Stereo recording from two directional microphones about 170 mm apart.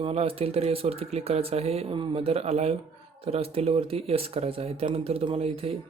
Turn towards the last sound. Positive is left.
turn(degrees=-35)  # may be behind; listen again after turning